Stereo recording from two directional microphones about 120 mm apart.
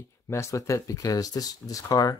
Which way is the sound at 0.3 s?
25° left (ahead or behind).